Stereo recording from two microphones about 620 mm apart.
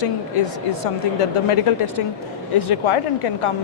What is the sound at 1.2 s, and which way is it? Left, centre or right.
Speech, left.